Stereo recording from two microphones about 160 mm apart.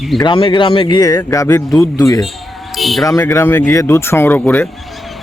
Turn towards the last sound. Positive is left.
turn(degrees=10)  # may be behind; listen again after turning